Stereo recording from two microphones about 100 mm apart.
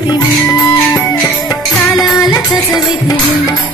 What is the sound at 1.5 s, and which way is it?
Music, 35° left (ahead or behind).